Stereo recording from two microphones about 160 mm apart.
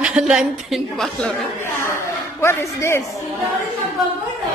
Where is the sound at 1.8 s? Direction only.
15° left (ahead or behind).